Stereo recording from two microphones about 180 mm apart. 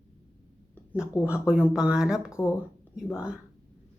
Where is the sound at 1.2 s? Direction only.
5° right (ahead or behind).